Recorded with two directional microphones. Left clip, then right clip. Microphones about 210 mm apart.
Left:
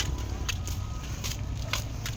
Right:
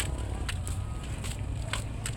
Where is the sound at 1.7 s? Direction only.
20° left (ahead or behind).